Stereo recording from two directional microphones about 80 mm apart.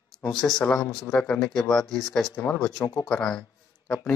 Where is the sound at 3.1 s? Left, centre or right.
Centre.